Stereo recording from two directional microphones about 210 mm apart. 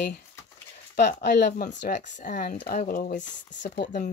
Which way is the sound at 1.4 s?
40° left (ahead or behind).